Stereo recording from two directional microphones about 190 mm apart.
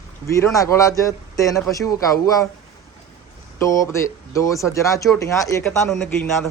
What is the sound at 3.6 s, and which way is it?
Speech, 15° left (ahead or behind).